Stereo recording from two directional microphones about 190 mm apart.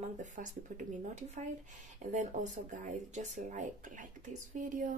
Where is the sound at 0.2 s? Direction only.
40° right (ahead or behind).